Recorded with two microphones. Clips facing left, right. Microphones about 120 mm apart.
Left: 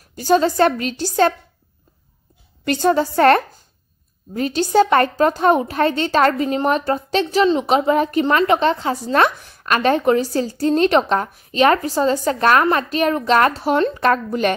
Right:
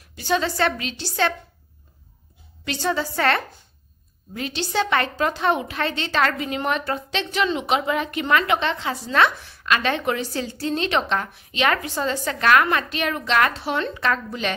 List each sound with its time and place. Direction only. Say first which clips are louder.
0.1 s a woman's voice: left 7 dB; 40° left (ahead or behind)
2.6 s a woman's voice: left 8 dB; 50° left (ahead or behind)